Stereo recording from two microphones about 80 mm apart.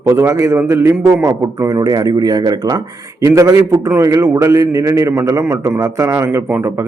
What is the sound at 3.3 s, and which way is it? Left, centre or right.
A man's voice, right.